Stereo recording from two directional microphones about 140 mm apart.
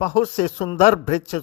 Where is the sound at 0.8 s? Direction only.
55° left (ahead or behind).